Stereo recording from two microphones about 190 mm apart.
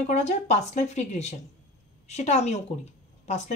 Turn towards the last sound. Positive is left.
turn(degrees=35)  # may be behind; listen again after turning